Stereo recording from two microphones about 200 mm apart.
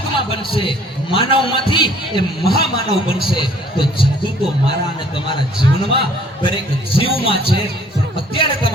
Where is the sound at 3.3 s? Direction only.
25° left (ahead or behind).